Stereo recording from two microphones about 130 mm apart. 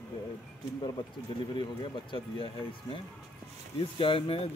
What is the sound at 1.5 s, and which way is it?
Speech, 40° left (ahead or behind).